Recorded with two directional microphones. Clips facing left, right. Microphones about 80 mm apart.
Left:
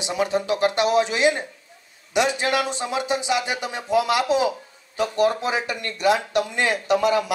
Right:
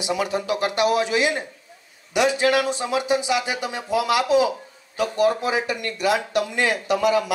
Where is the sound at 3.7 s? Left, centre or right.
Left.